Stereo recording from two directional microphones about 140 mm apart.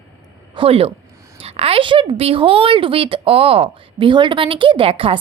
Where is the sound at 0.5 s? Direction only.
40° right (ahead or behind).